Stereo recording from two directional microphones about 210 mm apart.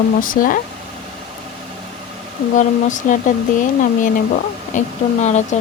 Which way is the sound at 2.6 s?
35° left (ahead or behind).